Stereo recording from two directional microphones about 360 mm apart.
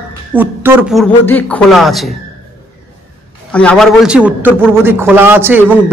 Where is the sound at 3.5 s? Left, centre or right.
Centre.